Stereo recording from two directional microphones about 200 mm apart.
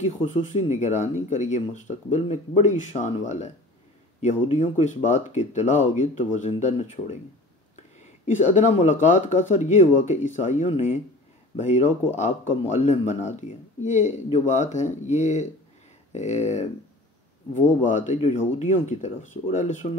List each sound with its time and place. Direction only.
0.3 s speech: 35° left (ahead or behind)
8.4 s speech: 35° left (ahead or behind)